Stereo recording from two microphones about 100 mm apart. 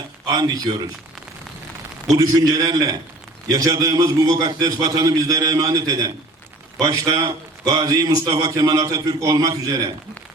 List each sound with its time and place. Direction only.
0.3 s a man's voice: 40° right (ahead or behind)
2.1 s a man's voice: 40° right (ahead or behind)